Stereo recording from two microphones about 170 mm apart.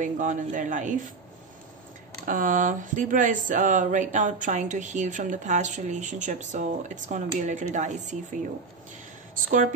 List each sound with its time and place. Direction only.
0.0 s speech: 50° right (ahead or behind)
2.2 s speech: 50° right (ahead or behind)